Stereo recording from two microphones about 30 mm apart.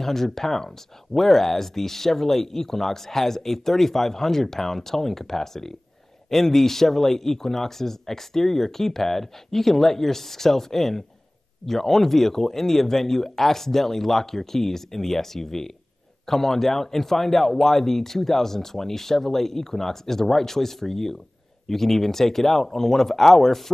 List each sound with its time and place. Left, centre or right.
0.0 s speech: centre